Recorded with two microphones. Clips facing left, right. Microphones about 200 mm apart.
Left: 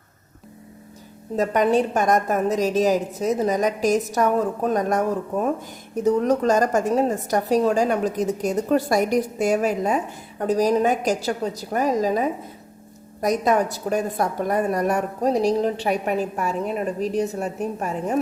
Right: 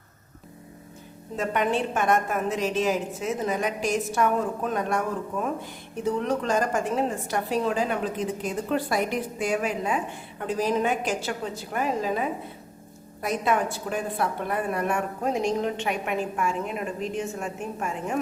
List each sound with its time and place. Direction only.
1.4 s a woman's voice: 40° left (ahead or behind)